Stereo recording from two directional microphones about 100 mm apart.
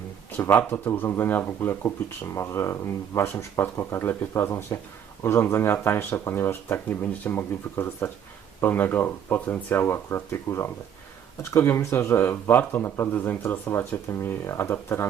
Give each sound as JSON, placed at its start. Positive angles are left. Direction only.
{"t": 0.3, "sound": "a man's voice", "side_deg": 20}